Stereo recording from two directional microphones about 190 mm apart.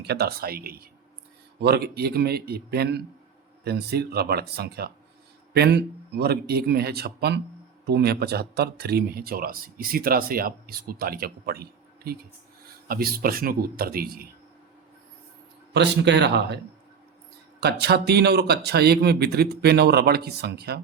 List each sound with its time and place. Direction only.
0.0 s speech: 55° right (ahead or behind)
15.7 s speech: 65° right (ahead or behind)
17.6 s speech: 60° right (ahead or behind)